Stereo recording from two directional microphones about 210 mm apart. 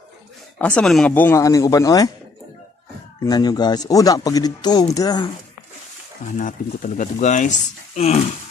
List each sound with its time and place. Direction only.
0.6 s speech: 5° left (ahead or behind)
3.3 s speech: 20° left (ahead or behind)
6.2 s speech: 40° left (ahead or behind)